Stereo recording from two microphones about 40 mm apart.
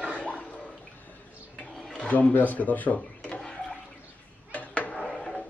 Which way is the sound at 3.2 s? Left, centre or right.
Left.